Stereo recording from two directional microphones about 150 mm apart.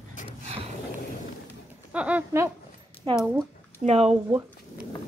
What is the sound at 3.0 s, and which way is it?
Speech, 35° right (ahead or behind).